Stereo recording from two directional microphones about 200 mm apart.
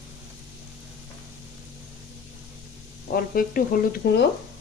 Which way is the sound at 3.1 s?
45° left (ahead or behind).